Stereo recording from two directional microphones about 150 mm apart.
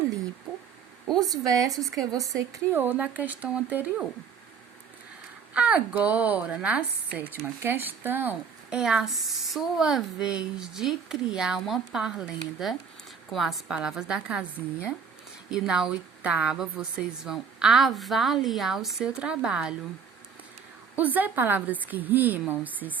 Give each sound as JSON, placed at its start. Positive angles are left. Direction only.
{"t": 1.2, "sound": "a woman's voice", "side_deg": -25}
{"t": 5.5, "sound": "a woman's voice", "side_deg": -10}
{"t": 15.4, "sound": "a woman's voice", "side_deg": -5}
{"t": 20.9, "sound": "speech", "side_deg": -10}